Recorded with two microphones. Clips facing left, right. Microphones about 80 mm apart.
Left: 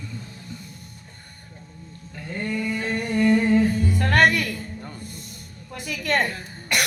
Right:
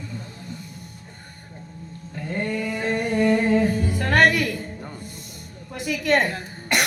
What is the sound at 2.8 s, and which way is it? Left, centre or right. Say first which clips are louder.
Music: right 2 dB; centre.